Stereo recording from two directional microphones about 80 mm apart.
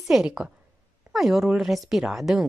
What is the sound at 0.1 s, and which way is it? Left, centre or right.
A woman's voice, centre.